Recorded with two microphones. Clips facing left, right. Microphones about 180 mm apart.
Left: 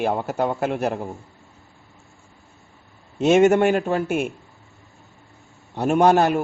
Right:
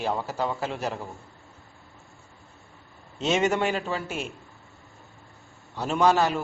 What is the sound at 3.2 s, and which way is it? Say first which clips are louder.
A man's voice: left 9 dB; 55° left (ahead or behind).